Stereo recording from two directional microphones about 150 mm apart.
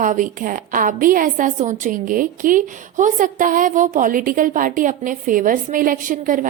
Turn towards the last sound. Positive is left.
turn(degrees=-60)  # may be behind; listen again after turning